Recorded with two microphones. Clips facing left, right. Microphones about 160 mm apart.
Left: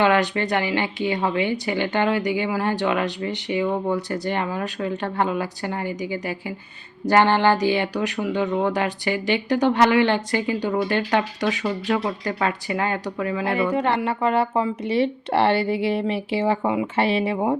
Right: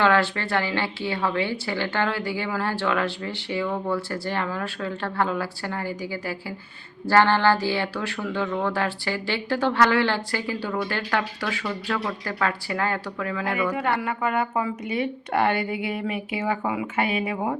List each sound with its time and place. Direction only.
0.0 s a woman's voice: 15° left (ahead or behind)